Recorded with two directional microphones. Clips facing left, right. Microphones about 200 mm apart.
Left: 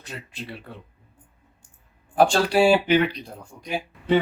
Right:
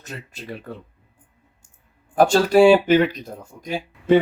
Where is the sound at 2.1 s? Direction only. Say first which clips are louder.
Right 4 dB; 45° right (ahead or behind).